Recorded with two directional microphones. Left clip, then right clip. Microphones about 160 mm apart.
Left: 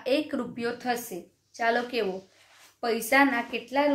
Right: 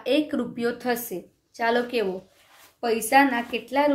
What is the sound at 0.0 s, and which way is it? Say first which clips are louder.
A woman's voice: right 3 dB; 15° right (ahead or behind).